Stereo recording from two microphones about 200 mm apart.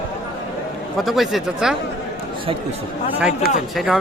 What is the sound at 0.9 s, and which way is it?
Speech, centre (ahead or behind).